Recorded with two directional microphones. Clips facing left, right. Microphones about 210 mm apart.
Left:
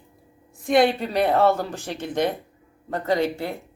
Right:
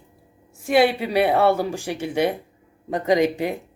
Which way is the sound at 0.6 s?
5° right (ahead or behind).